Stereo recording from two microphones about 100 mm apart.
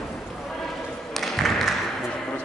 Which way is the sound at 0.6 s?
Centre (ahead or behind).